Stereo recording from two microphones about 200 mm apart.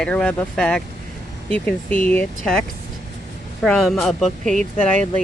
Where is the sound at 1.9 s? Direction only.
10° left (ahead or behind).